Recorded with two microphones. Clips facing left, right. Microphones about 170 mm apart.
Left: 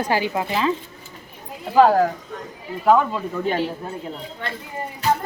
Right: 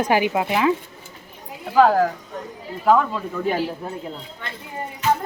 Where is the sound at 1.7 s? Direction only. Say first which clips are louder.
Left 1 dB; 5° left (ahead or behind).